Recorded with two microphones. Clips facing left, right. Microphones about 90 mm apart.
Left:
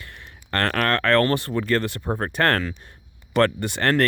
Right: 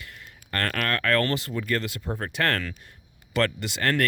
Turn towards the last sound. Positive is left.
turn(degrees=45)  # may be behind; listen again after turning